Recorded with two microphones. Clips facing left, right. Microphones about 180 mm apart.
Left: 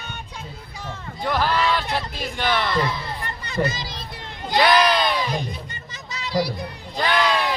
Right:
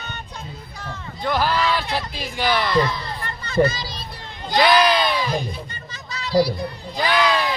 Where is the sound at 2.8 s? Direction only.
15° left (ahead or behind).